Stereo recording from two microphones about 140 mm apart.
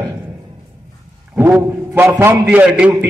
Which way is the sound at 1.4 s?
15° right (ahead or behind).